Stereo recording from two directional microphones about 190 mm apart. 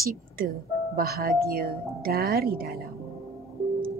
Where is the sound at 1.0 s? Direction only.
55° right (ahead or behind).